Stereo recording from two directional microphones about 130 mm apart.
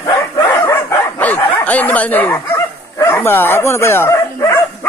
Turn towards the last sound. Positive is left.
turn(degrees=20)  # may be behind; listen again after turning